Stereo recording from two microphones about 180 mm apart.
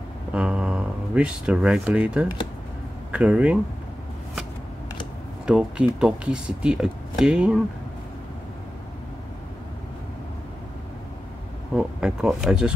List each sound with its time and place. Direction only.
0.3 s speech: 5° right (ahead or behind)
5.5 s speech: 5° right (ahead or behind)
11.7 s speech: 5° right (ahead or behind)